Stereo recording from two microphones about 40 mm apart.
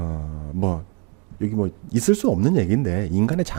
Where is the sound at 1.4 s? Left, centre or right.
Centre.